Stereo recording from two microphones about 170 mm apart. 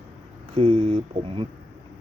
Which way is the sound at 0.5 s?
30° right (ahead or behind).